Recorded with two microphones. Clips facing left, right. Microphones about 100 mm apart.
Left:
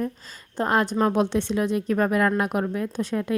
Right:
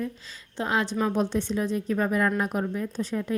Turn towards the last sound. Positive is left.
turn(degrees=65)  # may be behind; listen again after turning